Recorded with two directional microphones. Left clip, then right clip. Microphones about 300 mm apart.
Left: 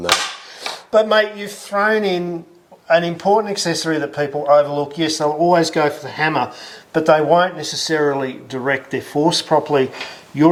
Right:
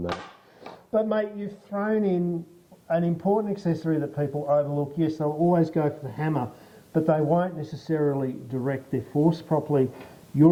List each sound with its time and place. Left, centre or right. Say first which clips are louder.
0.0 s cap gun: left 15 dB; centre
2.8 s speech: left 10 dB; centre
5.3 s speech: left 10 dB; left
5.5 s speech: left 9 dB; centre